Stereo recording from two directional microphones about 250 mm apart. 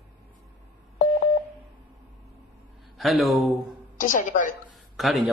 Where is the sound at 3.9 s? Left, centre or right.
Left.